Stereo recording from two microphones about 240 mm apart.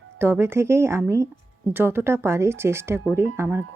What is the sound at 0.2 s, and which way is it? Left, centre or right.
Speech, centre.